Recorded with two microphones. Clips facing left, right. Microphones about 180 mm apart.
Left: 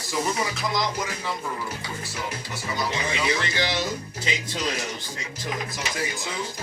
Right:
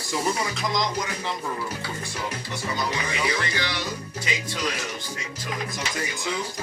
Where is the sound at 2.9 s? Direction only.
25° left (ahead or behind).